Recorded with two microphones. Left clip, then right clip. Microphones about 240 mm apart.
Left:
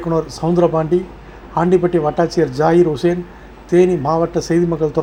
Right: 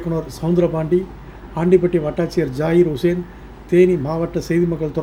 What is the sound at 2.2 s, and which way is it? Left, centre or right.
Speech, centre.